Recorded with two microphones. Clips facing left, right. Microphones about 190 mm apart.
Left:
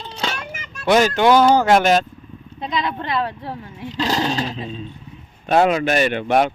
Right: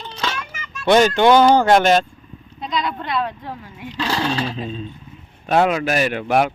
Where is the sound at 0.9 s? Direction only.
5° left (ahead or behind).